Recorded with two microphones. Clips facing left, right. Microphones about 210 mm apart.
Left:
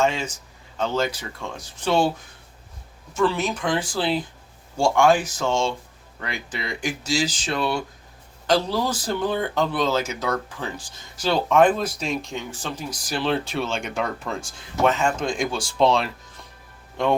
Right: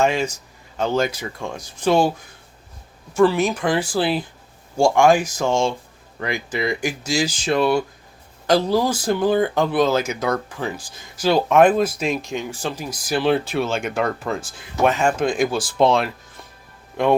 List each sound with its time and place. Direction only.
0.0 s a man's voice: 65° right (ahead or behind)
0.8 s speech: 10° right (ahead or behind)
3.2 s speech: 10° right (ahead or behind)
15.8 s speech: 50° right (ahead or behind)